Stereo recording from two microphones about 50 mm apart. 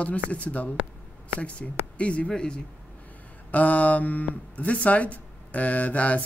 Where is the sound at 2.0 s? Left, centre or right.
Left.